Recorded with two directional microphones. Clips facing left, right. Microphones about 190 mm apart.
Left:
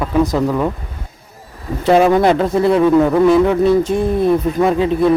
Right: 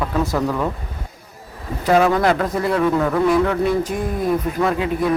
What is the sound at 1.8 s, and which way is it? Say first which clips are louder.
A man's voice: left 4 dB; 25° left (ahead or behind).